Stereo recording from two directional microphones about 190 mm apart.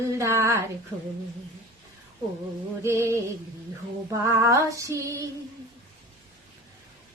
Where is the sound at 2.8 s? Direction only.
15° right (ahead or behind).